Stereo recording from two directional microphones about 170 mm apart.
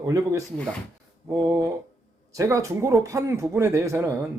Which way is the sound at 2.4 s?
20° right (ahead or behind).